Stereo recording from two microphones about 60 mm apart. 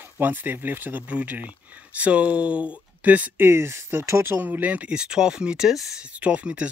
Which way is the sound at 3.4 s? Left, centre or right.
Right.